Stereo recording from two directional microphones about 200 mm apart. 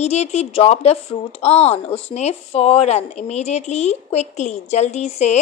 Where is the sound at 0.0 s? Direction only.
35° left (ahead or behind).